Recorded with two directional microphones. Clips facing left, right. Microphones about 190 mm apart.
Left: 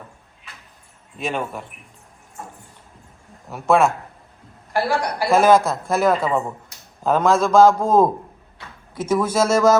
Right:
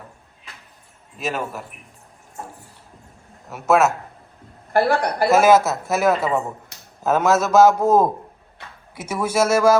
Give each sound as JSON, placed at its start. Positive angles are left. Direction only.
{"t": 1.2, "sound": "a man's voice", "side_deg": -5}
{"t": 3.5, "sound": "a man's voice", "side_deg": -5}
{"t": 4.7, "sound": "a woman's voice", "side_deg": -60}
{"t": 5.3, "sound": "a man's voice", "side_deg": -5}